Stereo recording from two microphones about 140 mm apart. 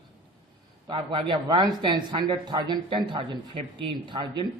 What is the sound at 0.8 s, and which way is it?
A man's voice, 40° right (ahead or behind).